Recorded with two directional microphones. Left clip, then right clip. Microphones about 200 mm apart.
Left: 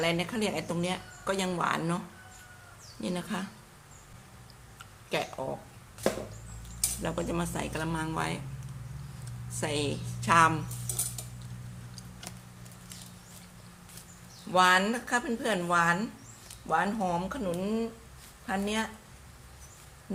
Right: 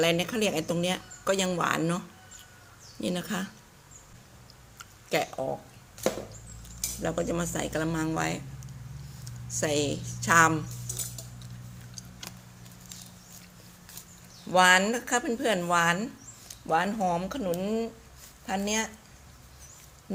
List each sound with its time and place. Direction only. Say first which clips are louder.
0.0 s speech: right 4 dB; 30° right (ahead or behind)
3.0 s speech: right 3 dB; 30° right (ahead or behind)
4.8 s a sound: right 4 dB; 25° right (ahead or behind)
7.0 s speech: right 4 dB; 15° right (ahead or behind)
9.5 s speech: right 4 dB; 25° right (ahead or behind)
14.5 s speech: right 3 dB; 30° right (ahead or behind)